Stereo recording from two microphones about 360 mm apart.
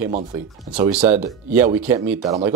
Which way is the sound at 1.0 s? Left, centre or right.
Centre.